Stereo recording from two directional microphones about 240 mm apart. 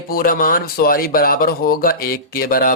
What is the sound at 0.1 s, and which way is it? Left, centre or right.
Speech, left.